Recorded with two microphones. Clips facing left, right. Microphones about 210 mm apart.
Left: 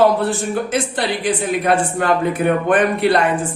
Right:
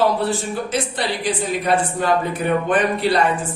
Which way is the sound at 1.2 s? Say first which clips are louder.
Left 4 dB; 55° left (ahead or behind).